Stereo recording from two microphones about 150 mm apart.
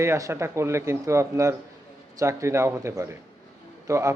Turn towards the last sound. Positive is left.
turn(degrees=-20)  # may be behind; listen again after turning